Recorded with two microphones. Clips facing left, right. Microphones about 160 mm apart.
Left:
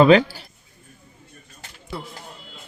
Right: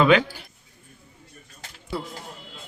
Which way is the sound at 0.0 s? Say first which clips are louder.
Left 5 dB; 35° left (ahead or behind).